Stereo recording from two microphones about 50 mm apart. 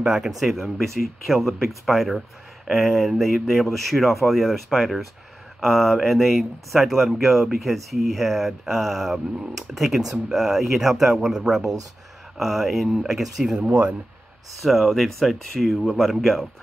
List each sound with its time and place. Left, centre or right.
0.0 s speech: centre
13.6 s speech: right
14.6 s speech: centre